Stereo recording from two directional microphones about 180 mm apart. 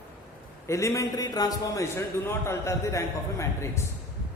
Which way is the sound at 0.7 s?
15° left (ahead or behind).